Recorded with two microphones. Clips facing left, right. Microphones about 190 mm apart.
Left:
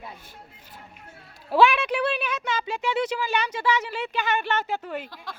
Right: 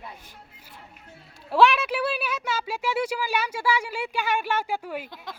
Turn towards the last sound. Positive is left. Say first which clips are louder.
# even
turn(degrees=-10)  # may be behind; listen again after turning